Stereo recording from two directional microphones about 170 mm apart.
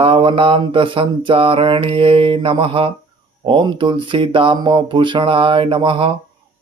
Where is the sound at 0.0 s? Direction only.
30° right (ahead or behind).